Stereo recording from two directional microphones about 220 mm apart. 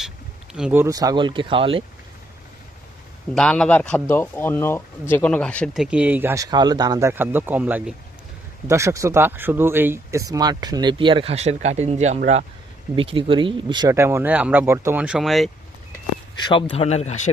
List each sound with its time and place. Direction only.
0.5 s speech: 5° right (ahead or behind); by 1.8 s 25° right (ahead or behind)
3.3 s speech: 5° left (ahead or behind)
16.5 s speech: 25° left (ahead or behind)